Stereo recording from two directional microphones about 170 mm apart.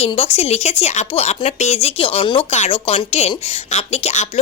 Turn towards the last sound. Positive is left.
turn(degrees=40)  # may be behind; listen again after turning